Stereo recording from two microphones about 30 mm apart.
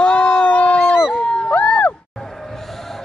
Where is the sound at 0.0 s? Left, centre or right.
Left.